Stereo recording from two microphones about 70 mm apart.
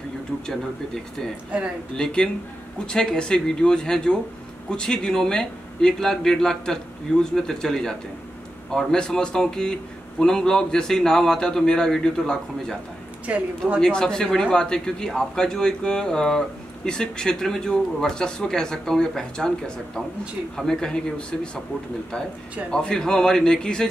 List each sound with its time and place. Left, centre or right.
2.0 s speech: centre
13.3 s a woman's voice: right
13.7 s speech: centre
20.5 s speech: centre
22.7 s speech: centre